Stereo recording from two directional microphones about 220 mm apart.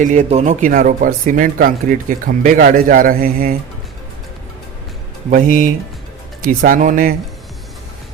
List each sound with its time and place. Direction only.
0.0 s speech: 35° right (ahead or behind)
5.3 s speech: 35° right (ahead or behind)